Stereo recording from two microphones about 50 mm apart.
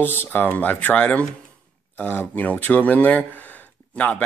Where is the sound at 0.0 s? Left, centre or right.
Left.